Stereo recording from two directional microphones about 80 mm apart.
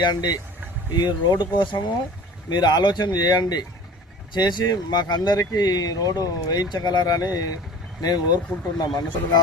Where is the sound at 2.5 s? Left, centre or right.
Left.